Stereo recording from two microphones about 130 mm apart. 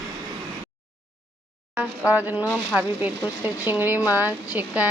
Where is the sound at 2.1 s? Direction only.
10° right (ahead or behind).